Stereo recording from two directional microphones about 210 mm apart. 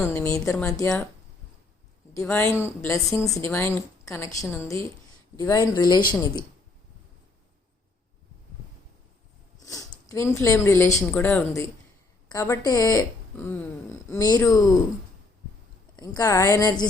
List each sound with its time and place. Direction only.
0.0 s a woman's voice: 10° left (ahead or behind)
2.1 s a woman's voice: 10° left (ahead or behind)
9.6 s a sound: 15° left (ahead or behind)
10.4 s a woman's voice: 15° left (ahead or behind)
16.0 s a woman's voice: 15° left (ahead or behind)